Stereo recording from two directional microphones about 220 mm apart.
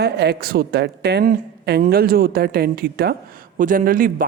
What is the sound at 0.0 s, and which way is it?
Speech, 45° right (ahead or behind).